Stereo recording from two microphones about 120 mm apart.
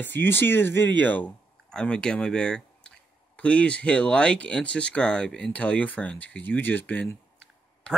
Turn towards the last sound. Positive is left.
turn(degrees=10)  # may be behind; listen again after turning